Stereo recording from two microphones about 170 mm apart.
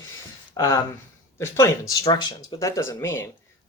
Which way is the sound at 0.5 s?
20° left (ahead or behind).